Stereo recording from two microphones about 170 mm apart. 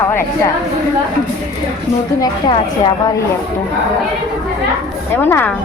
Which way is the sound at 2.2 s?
25° left (ahead or behind).